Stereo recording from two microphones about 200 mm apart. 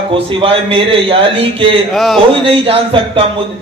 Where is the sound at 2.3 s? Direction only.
25° right (ahead or behind).